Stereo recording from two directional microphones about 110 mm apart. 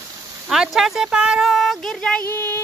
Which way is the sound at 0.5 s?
5° right (ahead or behind).